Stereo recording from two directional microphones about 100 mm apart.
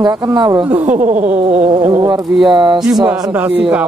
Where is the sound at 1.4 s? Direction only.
80° right.